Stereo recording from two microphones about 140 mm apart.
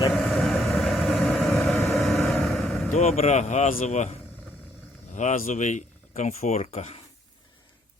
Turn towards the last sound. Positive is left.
turn(degrees=50)  # may be behind; listen again after turning